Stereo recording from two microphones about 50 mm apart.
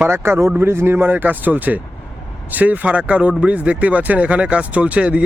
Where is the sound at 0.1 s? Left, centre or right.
Right.